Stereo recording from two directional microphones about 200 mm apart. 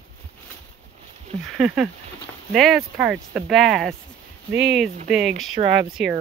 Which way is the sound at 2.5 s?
Centre (ahead or behind).